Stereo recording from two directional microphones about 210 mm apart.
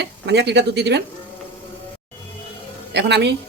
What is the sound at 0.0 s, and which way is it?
Speech, 55° right (ahead or behind).